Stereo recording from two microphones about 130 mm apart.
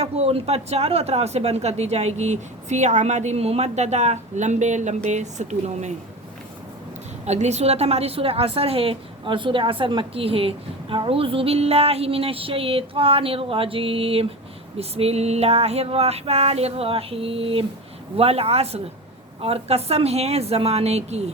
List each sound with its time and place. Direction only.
0.0 s speech: 50° right (ahead or behind)
7.3 s a woman's voice: 60° right (ahead or behind)